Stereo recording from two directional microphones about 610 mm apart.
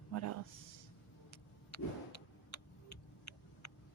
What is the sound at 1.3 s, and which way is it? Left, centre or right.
Vehicle, left.